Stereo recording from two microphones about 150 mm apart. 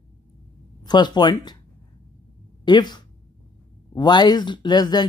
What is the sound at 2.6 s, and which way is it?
Speech, 30° left (ahead or behind).